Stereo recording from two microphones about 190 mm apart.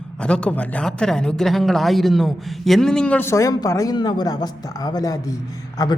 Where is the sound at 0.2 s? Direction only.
5° left (ahead or behind).